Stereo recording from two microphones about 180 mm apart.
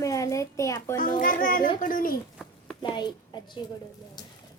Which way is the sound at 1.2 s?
50° left (ahead or behind).